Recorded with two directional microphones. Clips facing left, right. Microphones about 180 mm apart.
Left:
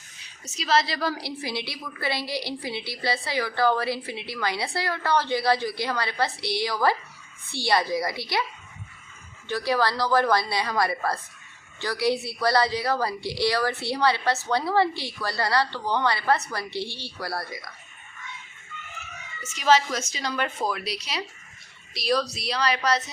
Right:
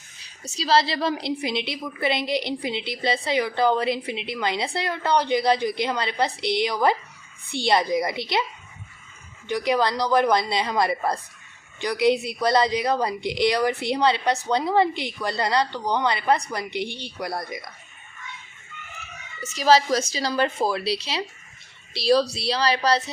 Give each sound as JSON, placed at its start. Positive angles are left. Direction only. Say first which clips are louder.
{"t": 0.4, "sound": "a woman's voice", "louder": "right 3 dB", "side_deg": -35}
{"t": 9.5, "sound": "a woman's voice", "louder": "right 2 dB", "side_deg": -15}
{"t": 19.4, "sound": "a woman's voice", "louder": "right 3 dB", "side_deg": -35}